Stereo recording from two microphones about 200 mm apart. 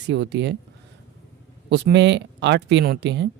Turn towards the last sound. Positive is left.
turn(degrees=-60)  # may be behind; listen again after turning